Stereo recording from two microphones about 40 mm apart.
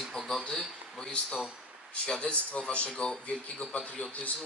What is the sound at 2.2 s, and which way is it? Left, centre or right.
A man's voice, left.